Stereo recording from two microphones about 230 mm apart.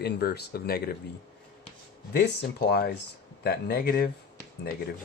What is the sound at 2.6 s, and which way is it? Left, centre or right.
Speech, left.